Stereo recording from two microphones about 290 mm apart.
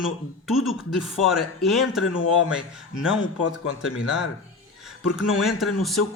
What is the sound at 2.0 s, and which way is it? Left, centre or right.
Speech, left.